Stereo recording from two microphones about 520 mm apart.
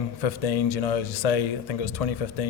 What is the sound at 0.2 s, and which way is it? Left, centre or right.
Speech, left.